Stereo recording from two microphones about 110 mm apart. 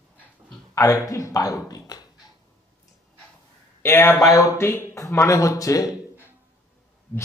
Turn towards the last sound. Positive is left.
turn(degrees=30)  # may be behind; listen again after turning